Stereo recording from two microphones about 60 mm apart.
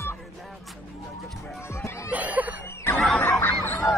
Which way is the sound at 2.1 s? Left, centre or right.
Right.